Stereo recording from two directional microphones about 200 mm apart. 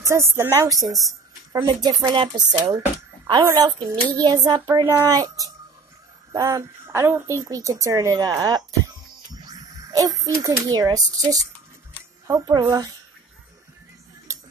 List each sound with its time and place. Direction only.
0.0 s a woman's voice: 15° right (ahead or behind)